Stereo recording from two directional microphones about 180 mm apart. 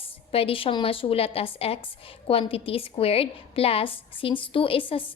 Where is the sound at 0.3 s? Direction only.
30° left (ahead or behind).